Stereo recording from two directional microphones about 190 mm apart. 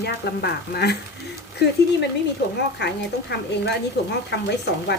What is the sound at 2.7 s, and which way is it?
Speech, 60° left (ahead or behind).